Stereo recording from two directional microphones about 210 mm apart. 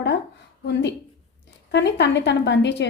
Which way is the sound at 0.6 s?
55° left (ahead or behind).